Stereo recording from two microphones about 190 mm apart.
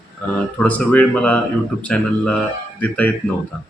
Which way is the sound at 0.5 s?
10° left (ahead or behind).